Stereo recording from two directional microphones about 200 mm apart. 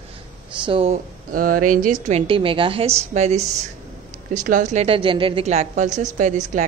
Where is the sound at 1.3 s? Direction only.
45° right (ahead or behind).